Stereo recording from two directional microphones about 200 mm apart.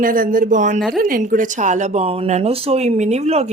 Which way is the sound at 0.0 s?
45° right (ahead or behind).